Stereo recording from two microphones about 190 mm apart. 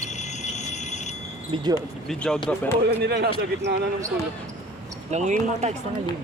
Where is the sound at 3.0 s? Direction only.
60° right (ahead or behind).